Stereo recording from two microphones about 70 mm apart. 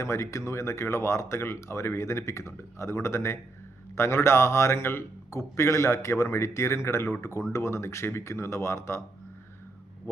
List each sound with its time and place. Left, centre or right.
0.0 s speech: left